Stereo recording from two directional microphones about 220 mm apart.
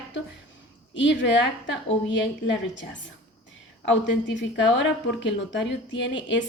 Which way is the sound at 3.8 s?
55° left (ahead or behind).